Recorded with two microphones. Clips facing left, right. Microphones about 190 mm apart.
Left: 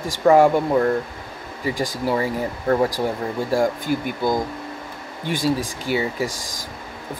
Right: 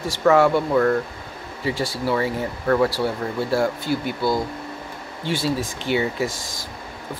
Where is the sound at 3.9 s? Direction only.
45° left (ahead or behind).